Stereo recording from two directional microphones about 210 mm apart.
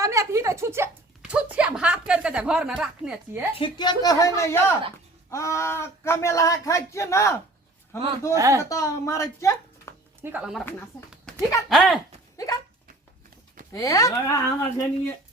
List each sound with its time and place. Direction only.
0.0 s speech: 15° right (ahead or behind)
3.5 s speech: 20° left (ahead or behind)
8.3 s speech: 15° right (ahead or behind)
8.7 s speech: 15° left (ahead or behind)
9.9 s a sound: 15° left (ahead or behind)
10.2 s speech: 5° right (ahead or behind)
11.3 s a sound: 5° left (ahead or behind)
11.7 s speech: centre (ahead or behind)
13.7 s speech: 15° left (ahead or behind)